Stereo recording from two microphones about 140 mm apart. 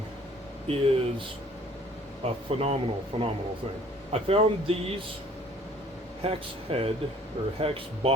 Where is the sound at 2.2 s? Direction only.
45° right (ahead or behind).